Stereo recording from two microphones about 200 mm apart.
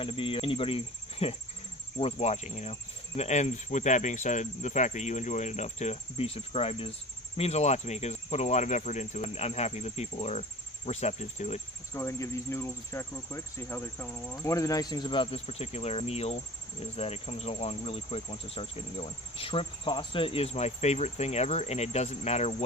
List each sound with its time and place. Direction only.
0.0 s speech: 25° left (ahead or behind)
11.9 s speech: 15° left (ahead or behind); by 22.5 s 35° left (ahead or behind)